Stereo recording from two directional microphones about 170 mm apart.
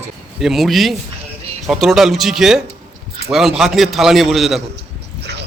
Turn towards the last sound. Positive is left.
turn(degrees=0)  # may be behind; listen again after turning